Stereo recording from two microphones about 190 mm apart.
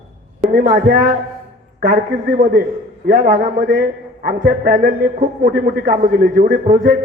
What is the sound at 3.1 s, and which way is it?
A man's voice, 40° right (ahead or behind).